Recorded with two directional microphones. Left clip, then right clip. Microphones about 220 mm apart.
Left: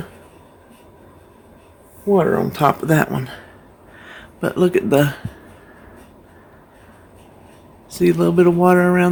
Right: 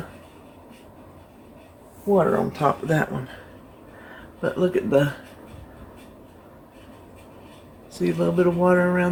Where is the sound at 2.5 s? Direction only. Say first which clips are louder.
Left 6 dB; 50° left (ahead or behind).